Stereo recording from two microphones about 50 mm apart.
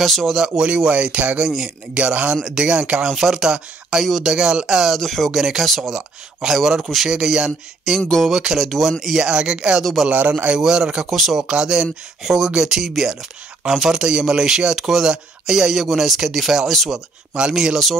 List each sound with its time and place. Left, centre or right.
0.0 s speech: centre
0.7 s speech: centre
3.1 s speech: centre
4.0 s speech: centre
4.3 s speech: centre
4.9 s speech: centre
8.5 s speech: centre
9.2 s speech: centre
10.5 s speech: centre
16.9 s speech: centre